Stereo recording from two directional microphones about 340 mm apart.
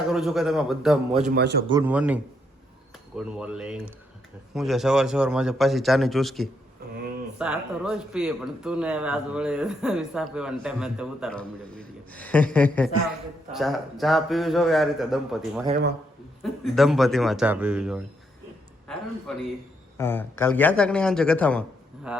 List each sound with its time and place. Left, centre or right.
0.1 s speech: centre
1.3 s a man's voice: right
1.6 s speech: centre
20.0 s speech: centre